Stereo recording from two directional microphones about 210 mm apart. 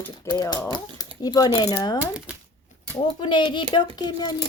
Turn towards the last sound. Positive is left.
turn(degrees=20)  # may be behind; listen again after turning